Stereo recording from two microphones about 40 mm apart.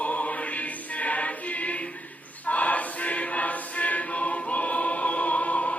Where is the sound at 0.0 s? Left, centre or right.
Left.